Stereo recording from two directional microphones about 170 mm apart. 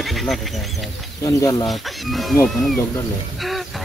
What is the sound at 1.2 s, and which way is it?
Speech, 20° left (ahead or behind).